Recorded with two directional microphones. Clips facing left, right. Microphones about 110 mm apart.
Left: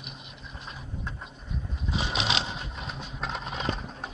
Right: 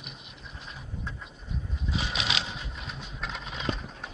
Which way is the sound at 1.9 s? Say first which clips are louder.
Left 3 dB; 25° left (ahead or behind).